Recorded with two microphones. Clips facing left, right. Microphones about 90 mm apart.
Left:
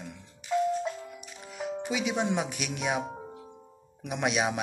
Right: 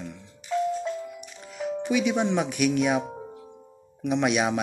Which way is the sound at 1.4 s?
10° left (ahead or behind).